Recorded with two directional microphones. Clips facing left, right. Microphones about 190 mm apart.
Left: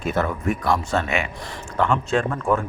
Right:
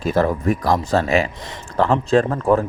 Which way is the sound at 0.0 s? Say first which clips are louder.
Right 5 dB; 35° right (ahead or behind).